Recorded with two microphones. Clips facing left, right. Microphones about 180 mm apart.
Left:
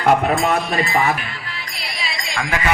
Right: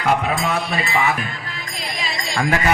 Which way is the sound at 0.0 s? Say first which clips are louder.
Left 4 dB; 55° left (ahead or behind).